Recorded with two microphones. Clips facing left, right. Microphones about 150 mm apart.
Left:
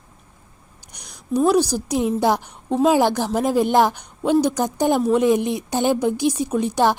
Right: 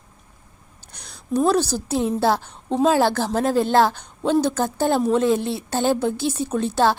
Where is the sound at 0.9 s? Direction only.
15° left (ahead or behind).